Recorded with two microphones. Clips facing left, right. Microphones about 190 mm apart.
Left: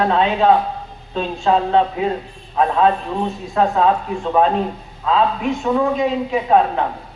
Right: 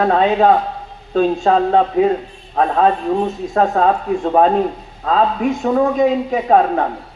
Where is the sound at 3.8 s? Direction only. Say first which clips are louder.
Right 1 dB; 45° right (ahead or behind).